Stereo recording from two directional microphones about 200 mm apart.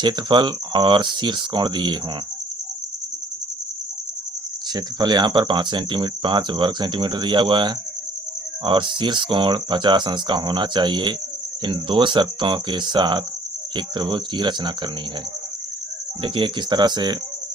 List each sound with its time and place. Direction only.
0.0 s speech: 25° right (ahead or behind)
4.7 s speech: 20° right (ahead or behind)
16.2 s speech: 25° right (ahead or behind)